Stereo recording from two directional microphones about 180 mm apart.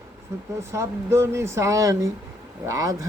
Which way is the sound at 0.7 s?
15° right (ahead or behind).